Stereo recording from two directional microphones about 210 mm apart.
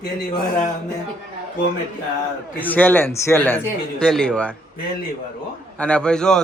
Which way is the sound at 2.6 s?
10° left (ahead or behind).